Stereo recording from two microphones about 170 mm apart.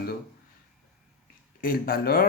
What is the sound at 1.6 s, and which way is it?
Speech, 60° left (ahead or behind).